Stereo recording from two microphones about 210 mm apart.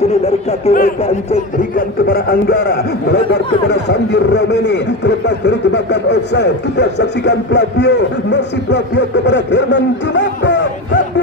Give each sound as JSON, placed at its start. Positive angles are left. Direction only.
{"t": 0.7, "sound": "a man's voice", "side_deg": 30}
{"t": 1.8, "sound": "speech", "side_deg": 45}